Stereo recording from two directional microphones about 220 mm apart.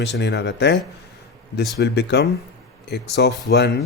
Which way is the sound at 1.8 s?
50° left (ahead or behind).